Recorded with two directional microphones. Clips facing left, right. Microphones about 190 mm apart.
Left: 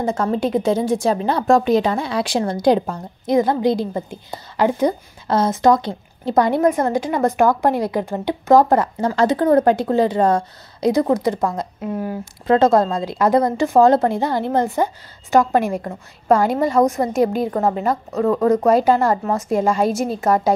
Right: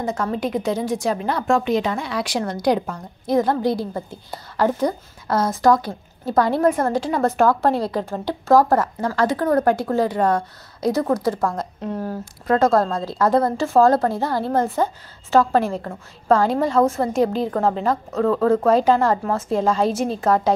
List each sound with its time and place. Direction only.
0.0 s a woman's voice: 30° left (ahead or behind)
3.3 s a woman's voice: 10° left (ahead or behind)
12.4 s a woman's voice: 25° left (ahead or behind)